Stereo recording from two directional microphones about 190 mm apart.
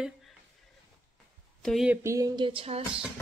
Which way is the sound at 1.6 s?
Centre (ahead or behind).